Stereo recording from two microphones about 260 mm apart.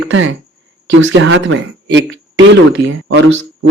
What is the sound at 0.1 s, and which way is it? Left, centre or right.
A man's voice, right.